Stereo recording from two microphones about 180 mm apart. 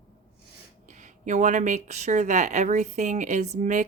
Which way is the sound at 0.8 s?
40° right (ahead or behind).